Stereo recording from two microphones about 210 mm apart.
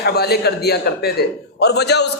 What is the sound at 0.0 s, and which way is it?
A man's voice, 50° left (ahead or behind).